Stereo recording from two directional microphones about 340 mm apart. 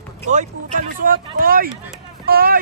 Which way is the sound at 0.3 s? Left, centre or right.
Right.